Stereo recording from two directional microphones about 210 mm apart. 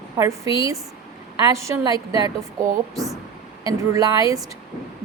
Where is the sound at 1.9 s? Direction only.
25° left (ahead or behind).